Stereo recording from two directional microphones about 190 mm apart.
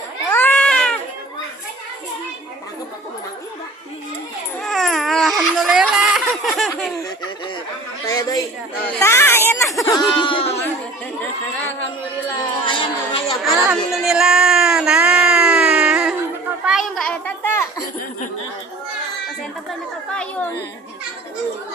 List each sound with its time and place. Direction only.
0.3 s cat: 10° left (ahead or behind)
4.6 s baby cry: centre (ahead or behind)
5.4 s laughter: centre (ahead or behind)
8.0 s a sound: 15° left (ahead or behind)
9.0 s speech: 15° left (ahead or behind)
10.0 s speech: 25° left (ahead or behind)
12.4 s speech: 25° left (ahead or behind)
13.4 s a sound: centre (ahead or behind)
20.1 s speech: 5° left (ahead or behind)